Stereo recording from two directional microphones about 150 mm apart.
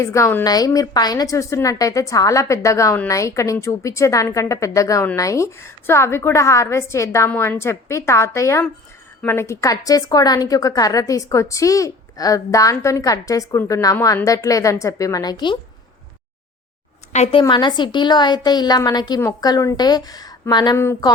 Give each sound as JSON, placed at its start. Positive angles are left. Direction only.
{"t": 0.0, "sound": "a woman's voice", "side_deg": 20}
{"t": 17.1, "sound": "a woman's voice", "side_deg": 50}
{"t": 17.5, "sound": "a woman's voice", "side_deg": 30}